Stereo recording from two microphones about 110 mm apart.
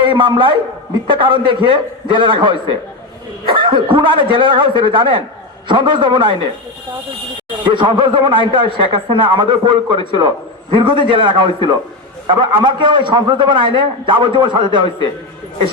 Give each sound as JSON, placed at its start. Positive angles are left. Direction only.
{"t": 0.0, "sound": "a man's voice", "side_deg": -50}
{"t": 7.6, "sound": "a man's voice", "side_deg": -45}